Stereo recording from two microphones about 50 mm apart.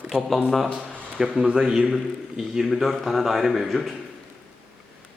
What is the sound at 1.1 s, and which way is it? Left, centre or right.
A man's voice, centre.